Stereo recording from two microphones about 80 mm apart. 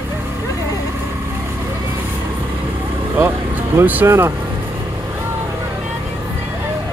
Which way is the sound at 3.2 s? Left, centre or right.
Right.